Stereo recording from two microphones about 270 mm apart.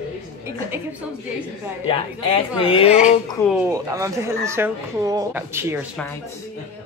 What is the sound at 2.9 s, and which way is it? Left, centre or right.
Speech, centre.